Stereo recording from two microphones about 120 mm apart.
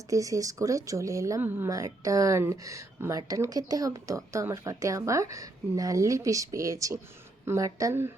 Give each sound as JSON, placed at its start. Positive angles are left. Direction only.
{"t": 0.1, "sound": "speech", "side_deg": -30}
{"t": 1.4, "sound": "a woman's voice", "side_deg": -15}
{"t": 1.7, "sound": "speech", "side_deg": -30}